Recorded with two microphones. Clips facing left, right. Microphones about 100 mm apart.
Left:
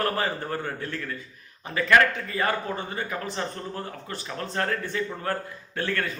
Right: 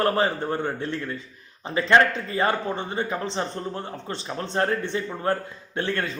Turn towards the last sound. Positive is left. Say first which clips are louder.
# right 2 dB
turn(degrees=-25)  # may be behind; listen again after turning